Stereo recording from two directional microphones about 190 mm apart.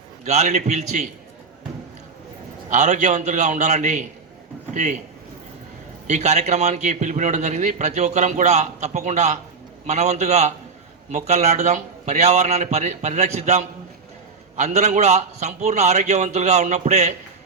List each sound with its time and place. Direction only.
0.3 s a man's voice: 35° right (ahead or behind)
2.6 s a man's voice: 40° right (ahead or behind)
6.1 s a man's voice: 35° right (ahead or behind)